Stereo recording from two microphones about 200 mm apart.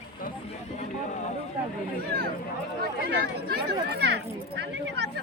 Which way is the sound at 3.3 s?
55° right (ahead or behind).